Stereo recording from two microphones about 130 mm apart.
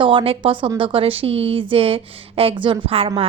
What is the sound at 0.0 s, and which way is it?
A woman's voice, 40° right (ahead or behind).